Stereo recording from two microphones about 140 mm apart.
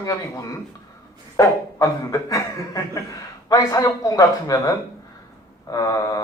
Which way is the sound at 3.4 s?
25° left (ahead or behind).